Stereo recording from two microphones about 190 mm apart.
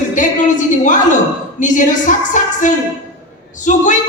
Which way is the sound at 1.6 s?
40° left (ahead or behind).